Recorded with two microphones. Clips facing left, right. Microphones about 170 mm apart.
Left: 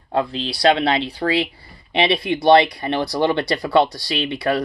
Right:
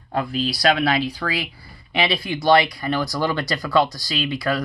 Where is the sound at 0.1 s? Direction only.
25° left (ahead or behind).